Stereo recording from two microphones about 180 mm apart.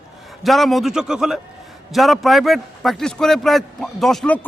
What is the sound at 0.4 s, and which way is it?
A man's voice, centre (ahead or behind).